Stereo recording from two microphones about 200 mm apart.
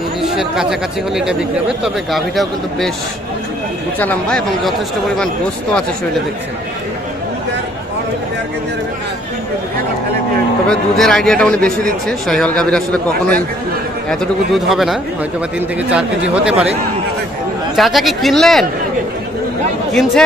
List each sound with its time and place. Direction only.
0.2 s a man's voice: centre (ahead or behind)
4.0 s a man's voice: 5° left (ahead or behind)
10.7 s a man's voice: 5° left (ahead or behind)
14.0 s a man's voice: centre (ahead or behind)
17.7 s a man's voice: centre (ahead or behind)
19.9 s a man's voice: centre (ahead or behind)